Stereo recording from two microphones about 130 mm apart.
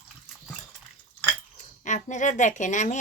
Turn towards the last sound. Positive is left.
turn(degrees=70)  # may be behind; listen again after turning